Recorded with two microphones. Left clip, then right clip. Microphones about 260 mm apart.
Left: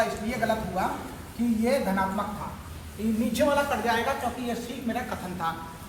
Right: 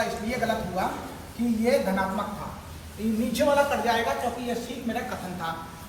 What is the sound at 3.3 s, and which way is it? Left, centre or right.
Speech, left.